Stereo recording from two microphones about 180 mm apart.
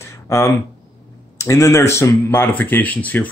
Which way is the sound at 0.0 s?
15° left (ahead or behind).